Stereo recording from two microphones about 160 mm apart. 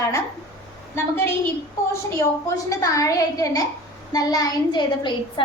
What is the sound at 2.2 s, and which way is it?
A woman's voice, 20° left (ahead or behind).